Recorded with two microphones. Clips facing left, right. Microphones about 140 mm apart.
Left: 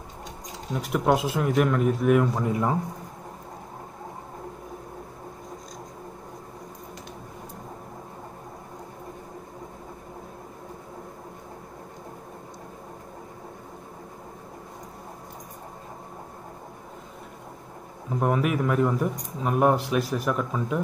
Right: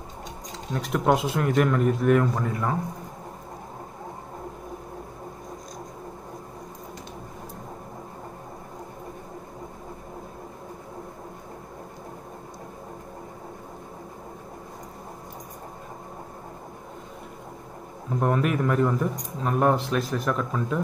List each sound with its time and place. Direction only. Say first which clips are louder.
0.7 s speech: even; 5° left (ahead or behind)
2.4 s speech: left 2 dB; 20° left (ahead or behind)
18.2 s speech: even; 5° left (ahead or behind)